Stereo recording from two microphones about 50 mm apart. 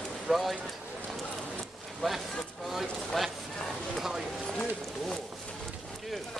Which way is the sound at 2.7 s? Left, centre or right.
Centre.